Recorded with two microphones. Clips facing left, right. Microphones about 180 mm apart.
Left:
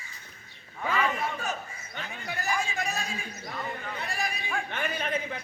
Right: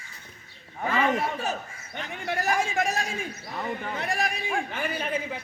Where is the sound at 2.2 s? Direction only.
50° right (ahead or behind).